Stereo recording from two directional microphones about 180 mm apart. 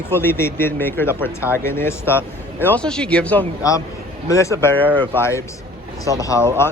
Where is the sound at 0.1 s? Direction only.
10° left (ahead or behind).